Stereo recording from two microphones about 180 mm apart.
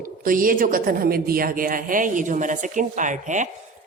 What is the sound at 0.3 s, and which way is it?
A woman's voice, 50° right (ahead or behind).